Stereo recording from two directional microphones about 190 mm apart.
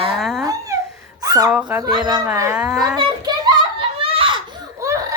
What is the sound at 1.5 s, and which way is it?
Speech, 5° right (ahead or behind).